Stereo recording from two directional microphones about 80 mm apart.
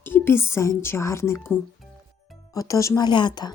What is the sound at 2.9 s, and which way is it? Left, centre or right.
Speech, left.